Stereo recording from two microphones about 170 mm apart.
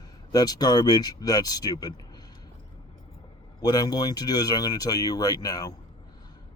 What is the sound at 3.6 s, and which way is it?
Speech, 20° left (ahead or behind).